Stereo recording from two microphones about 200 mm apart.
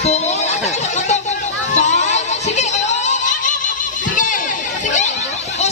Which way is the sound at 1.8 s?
35° left (ahead or behind).